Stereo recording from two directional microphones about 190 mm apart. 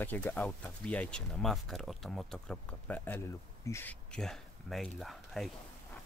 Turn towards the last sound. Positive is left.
turn(degrees=0)  # may be behind; listen again after turning